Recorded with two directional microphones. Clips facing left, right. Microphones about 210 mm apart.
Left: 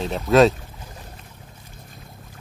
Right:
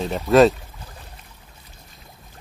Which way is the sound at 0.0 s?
Centre (ahead or behind).